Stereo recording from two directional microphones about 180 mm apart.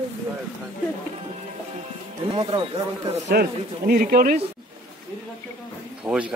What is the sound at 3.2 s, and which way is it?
Speech, 60° right (ahead or behind).